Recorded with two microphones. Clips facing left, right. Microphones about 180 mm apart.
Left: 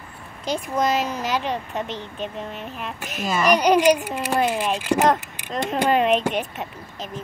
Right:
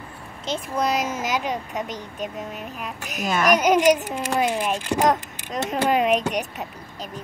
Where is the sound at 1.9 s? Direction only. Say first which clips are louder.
Left 1 dB; 40° right (ahead or behind).